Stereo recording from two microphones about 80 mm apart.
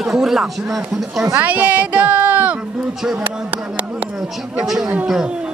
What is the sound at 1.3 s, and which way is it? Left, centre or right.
Speech, centre.